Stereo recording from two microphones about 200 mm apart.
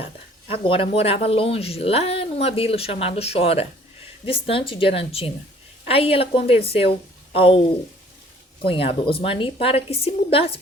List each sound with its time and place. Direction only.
0.5 s a woman's voice: 25° left (ahead or behind)
8.6 s a woman's voice: 25° left (ahead or behind)